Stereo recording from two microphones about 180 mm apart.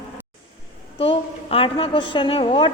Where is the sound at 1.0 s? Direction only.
30° left (ahead or behind).